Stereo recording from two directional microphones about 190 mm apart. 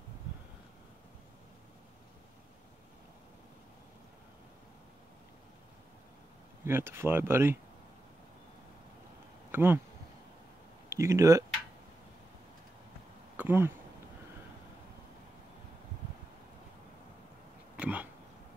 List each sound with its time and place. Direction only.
6.6 s speech: 15° right (ahead or behind)
9.5 s speech: 10° right (ahead or behind)
10.9 s speech: 15° right (ahead or behind)
13.4 s speech: 10° right (ahead or behind)
17.7 s a sound: 10° right (ahead or behind)